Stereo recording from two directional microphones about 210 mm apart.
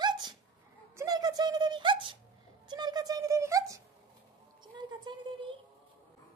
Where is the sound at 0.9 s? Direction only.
15° right (ahead or behind).